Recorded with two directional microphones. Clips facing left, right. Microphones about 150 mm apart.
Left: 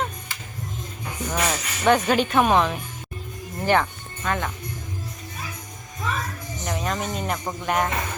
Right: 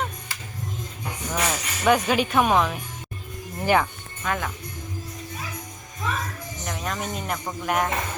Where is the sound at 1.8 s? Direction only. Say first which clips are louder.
Left 1 dB; 5° right (ahead or behind).